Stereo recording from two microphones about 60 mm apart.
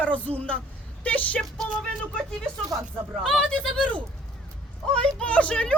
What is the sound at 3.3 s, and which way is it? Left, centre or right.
Speech, centre.